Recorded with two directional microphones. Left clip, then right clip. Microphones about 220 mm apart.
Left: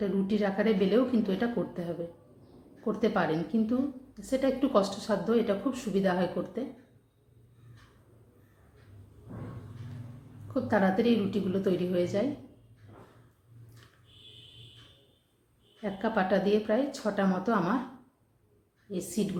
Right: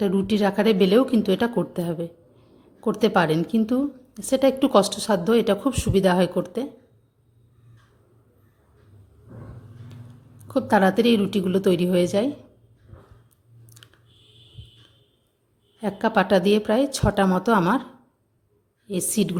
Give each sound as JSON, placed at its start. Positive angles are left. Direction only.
{"t": 0.0, "sound": "a woman's voice", "side_deg": -50}
{"t": 10.5, "sound": "a woman's voice", "side_deg": -50}
{"t": 15.8, "sound": "a woman's voice", "side_deg": -50}
{"t": 18.9, "sound": "a woman's voice", "side_deg": -50}